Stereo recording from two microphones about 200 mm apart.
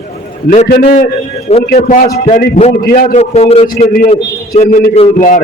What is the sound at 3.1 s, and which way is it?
Speech, 35° left (ahead or behind).